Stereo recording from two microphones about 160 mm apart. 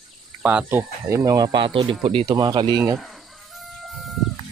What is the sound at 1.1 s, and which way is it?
Speech, 20° right (ahead or behind).